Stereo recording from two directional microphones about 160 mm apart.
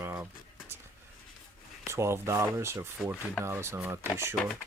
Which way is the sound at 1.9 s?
15° right (ahead or behind).